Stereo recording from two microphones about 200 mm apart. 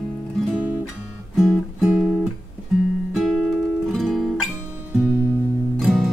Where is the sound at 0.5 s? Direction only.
5° right (ahead or behind).